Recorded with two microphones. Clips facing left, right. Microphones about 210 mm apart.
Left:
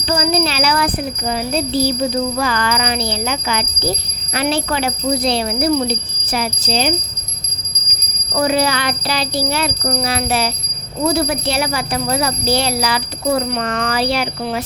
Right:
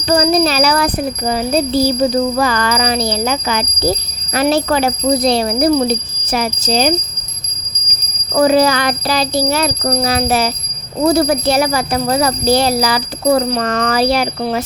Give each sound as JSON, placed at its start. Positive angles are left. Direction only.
{"t": 0.1, "sound": "speech", "side_deg": -40}
{"t": 8.4, "sound": "speech", "side_deg": -40}